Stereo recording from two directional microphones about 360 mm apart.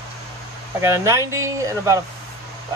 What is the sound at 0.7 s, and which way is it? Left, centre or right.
Speech, centre.